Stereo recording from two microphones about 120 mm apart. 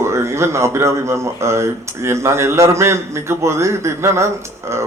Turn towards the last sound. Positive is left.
turn(degrees=-25)  # may be behind; listen again after turning